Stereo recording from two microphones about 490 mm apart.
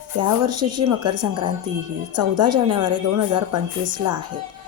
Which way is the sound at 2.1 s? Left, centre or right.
Right.